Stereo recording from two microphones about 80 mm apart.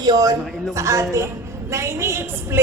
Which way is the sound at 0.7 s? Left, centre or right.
Right.